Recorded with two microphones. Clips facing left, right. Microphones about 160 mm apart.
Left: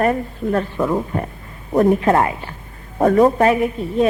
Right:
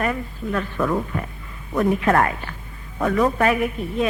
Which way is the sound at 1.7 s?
40° left (ahead or behind).